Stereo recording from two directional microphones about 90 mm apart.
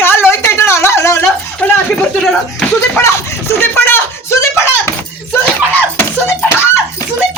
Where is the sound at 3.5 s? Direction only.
25° left (ahead or behind).